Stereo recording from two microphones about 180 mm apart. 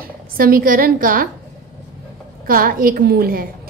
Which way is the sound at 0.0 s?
55° right (ahead or behind).